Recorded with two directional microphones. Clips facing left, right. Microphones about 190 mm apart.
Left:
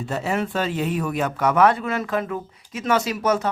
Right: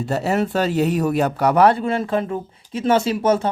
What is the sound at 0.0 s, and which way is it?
A man's voice, 40° right (ahead or behind).